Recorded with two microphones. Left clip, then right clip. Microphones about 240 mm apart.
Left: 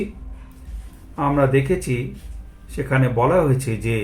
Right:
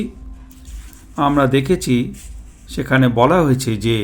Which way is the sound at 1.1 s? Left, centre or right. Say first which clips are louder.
Right 3 dB; right.